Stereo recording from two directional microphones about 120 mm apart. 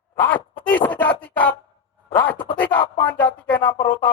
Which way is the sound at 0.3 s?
10° left (ahead or behind).